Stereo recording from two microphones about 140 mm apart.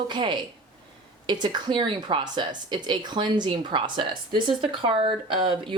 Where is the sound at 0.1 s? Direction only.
30° right (ahead or behind).